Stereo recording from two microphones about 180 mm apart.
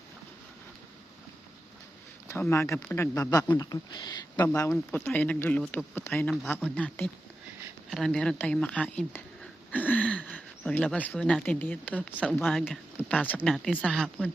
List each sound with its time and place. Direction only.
2.2 s speech: 15° left (ahead or behind)
9.7 s a sound: 10° left (ahead or behind)
10.6 s speech: centre (ahead or behind)